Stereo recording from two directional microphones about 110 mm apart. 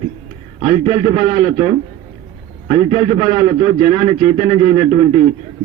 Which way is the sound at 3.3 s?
50° left (ahead or behind).